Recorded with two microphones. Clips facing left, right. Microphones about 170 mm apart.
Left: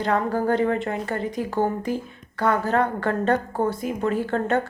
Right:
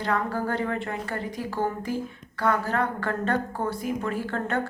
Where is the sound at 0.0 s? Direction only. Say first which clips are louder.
Left 5 dB; 25° left (ahead or behind).